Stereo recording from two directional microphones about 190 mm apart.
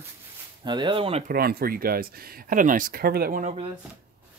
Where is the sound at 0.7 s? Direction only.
25° right (ahead or behind).